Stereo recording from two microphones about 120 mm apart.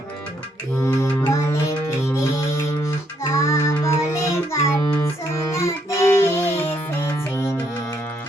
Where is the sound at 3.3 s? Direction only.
25° left (ahead or behind).